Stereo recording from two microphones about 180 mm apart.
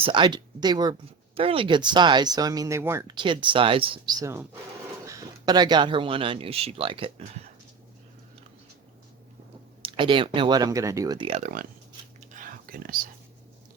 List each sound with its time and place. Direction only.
0.0 s speech: 25° right (ahead or behind)
3.2 s speech: 25° right (ahead or behind)
9.8 s speech: 30° right (ahead or behind)
11.3 s speech: 40° right (ahead or behind)
12.3 s whispering: 50° right (ahead or behind)